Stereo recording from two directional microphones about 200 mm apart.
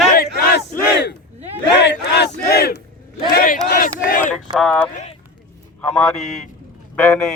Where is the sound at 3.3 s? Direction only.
50° left (ahead or behind).